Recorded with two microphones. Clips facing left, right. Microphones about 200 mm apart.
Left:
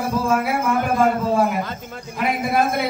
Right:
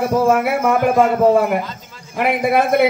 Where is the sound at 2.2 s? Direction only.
65° right (ahead or behind).